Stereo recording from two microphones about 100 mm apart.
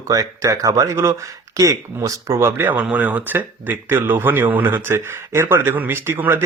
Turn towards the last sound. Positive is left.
turn(degrees=-20)  # may be behind; listen again after turning